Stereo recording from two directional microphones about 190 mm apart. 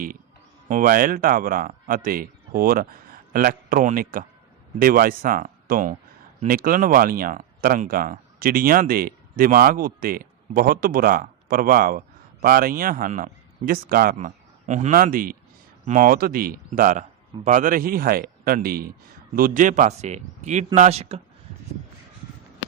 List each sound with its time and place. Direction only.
0.7 s a man's voice: 45° right (ahead or behind)